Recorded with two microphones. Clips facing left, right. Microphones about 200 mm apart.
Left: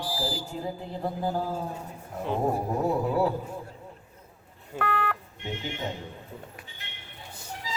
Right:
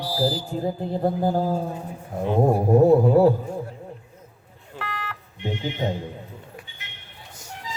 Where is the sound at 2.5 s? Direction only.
55° right (ahead or behind).